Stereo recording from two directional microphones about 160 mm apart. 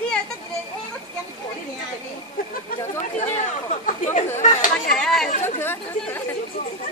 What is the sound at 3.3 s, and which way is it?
Speech, 50° left (ahead or behind).